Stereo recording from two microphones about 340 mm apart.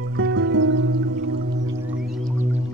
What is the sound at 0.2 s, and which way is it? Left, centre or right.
Music, right.